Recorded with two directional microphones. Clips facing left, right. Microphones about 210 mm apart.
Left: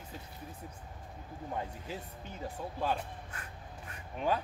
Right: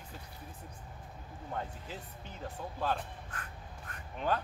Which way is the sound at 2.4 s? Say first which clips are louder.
Left 1 dB; 10° left (ahead or behind).